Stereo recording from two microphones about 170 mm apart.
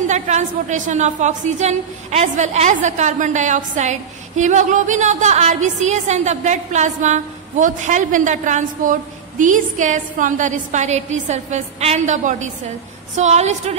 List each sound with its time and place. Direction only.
0.0 s a woman's voice: 45° right (ahead or behind)